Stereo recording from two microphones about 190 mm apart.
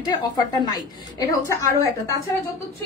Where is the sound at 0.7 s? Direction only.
20° left (ahead or behind).